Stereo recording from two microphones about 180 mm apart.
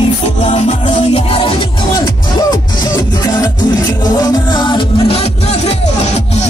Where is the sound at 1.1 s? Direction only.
30° left (ahead or behind).